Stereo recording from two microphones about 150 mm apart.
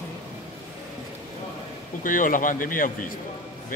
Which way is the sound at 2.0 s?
65° left (ahead or behind).